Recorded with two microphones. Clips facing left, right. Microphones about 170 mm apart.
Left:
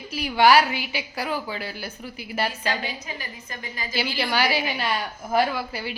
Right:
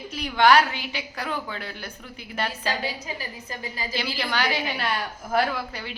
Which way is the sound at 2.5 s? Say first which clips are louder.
Even; 35° right (ahead or behind).